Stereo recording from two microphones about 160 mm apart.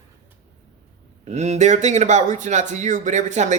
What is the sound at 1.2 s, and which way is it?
A man's voice, 45° right (ahead or behind).